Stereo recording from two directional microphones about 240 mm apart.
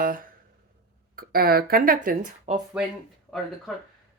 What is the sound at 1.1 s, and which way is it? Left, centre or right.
Speech, right.